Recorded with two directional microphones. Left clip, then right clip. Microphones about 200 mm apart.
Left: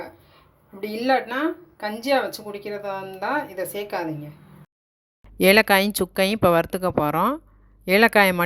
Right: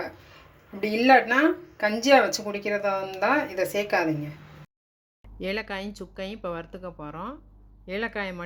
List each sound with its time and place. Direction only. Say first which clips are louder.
0.8 s speech: right 3 dB; 5° right (ahead or behind)
5.4 s speech: left 15 dB; 55° left (ahead or behind)